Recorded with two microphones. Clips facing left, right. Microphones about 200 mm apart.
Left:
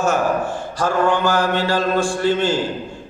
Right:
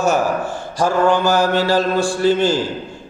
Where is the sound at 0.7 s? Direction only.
10° right (ahead or behind).